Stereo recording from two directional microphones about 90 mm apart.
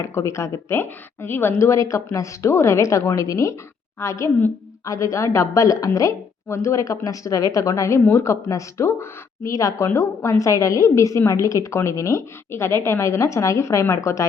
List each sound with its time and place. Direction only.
0.0 s a woman's voice: 35° left (ahead or behind)